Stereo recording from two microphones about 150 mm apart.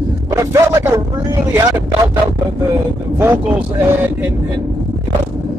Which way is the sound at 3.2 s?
15° right (ahead or behind).